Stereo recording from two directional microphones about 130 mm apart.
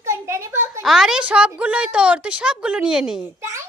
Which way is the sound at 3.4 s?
20° right (ahead or behind).